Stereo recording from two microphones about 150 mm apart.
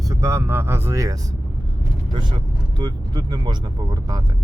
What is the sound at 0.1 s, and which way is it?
Speech, 20° right (ahead or behind).